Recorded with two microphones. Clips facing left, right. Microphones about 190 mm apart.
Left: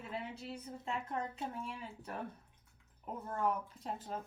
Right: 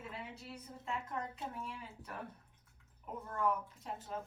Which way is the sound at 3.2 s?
30° left (ahead or behind).